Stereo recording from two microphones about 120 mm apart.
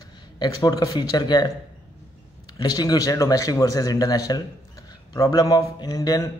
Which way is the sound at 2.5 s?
35° left (ahead or behind).